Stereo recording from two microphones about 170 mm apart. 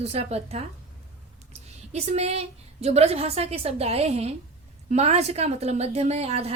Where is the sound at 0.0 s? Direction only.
40° right (ahead or behind).